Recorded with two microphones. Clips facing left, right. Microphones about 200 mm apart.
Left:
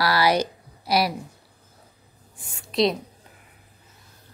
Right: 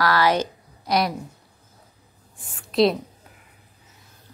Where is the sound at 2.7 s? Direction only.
Centre (ahead or behind).